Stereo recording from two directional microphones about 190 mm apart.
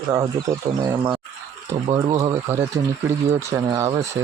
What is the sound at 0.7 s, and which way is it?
Speech, 20° right (ahead or behind).